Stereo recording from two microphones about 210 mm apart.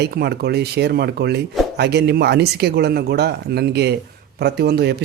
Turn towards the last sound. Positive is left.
turn(degrees=-50)  # may be behind; listen again after turning